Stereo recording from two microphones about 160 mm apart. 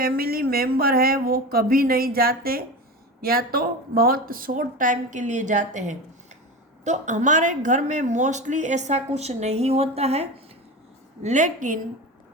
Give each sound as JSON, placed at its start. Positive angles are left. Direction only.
{"t": 0.0, "sound": "speech", "side_deg": -70}